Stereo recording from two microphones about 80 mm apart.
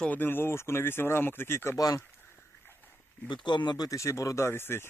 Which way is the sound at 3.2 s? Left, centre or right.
Left.